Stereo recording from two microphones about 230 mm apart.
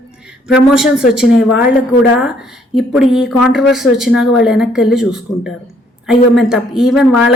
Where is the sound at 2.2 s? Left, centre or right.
Centre.